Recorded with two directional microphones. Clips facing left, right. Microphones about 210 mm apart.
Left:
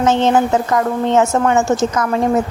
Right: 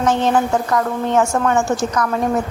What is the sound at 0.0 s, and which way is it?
A woman's voice, 25° left (ahead or behind).